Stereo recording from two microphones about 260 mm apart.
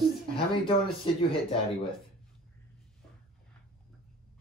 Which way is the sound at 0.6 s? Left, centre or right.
Centre.